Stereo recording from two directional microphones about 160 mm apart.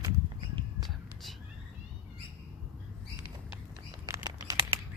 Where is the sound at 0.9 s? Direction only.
Centre (ahead or behind).